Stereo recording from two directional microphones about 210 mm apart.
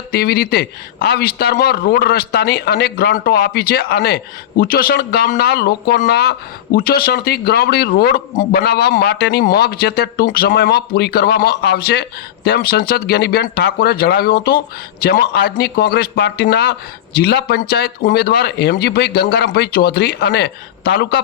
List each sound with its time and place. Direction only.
0.1 s speech: 45° left (ahead or behind)